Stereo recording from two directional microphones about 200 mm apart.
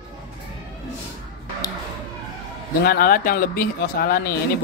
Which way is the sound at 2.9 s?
45° left (ahead or behind).